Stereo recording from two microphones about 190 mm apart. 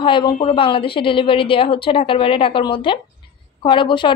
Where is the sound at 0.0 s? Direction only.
25° left (ahead or behind).